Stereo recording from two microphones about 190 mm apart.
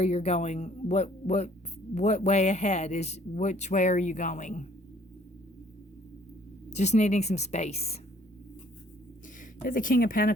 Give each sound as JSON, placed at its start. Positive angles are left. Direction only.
{"t": 0.0, "sound": "speech", "side_deg": 35}
{"t": 6.7, "sound": "speech", "side_deg": 35}
{"t": 9.6, "sound": "speech", "side_deg": 45}